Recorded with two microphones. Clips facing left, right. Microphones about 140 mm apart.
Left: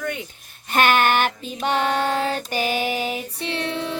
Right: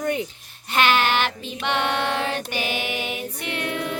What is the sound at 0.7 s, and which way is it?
Child singing, 50° left (ahead or behind).